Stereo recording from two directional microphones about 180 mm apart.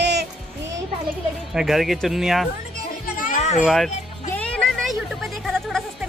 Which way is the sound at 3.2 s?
45° left (ahead or behind).